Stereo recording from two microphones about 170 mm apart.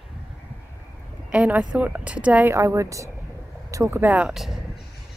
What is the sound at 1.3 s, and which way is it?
A woman's voice, 10° right (ahead or behind).